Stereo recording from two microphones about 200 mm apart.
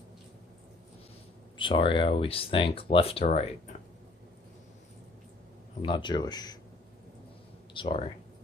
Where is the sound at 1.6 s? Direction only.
25° left (ahead or behind).